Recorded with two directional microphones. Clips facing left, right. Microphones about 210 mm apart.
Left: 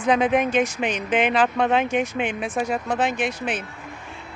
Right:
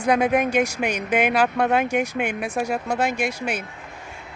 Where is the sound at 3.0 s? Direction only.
10° right (ahead or behind).